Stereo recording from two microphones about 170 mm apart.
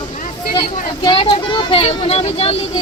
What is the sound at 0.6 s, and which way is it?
Speech, 30° left (ahead or behind).